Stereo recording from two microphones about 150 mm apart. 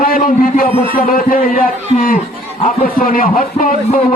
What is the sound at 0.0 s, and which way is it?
A man's voice, 65° left (ahead or behind).